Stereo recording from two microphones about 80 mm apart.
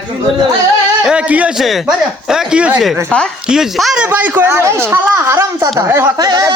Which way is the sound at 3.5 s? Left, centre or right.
Centre.